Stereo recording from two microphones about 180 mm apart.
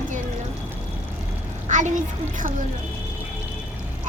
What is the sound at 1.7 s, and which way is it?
Speech, 45° right (ahead or behind).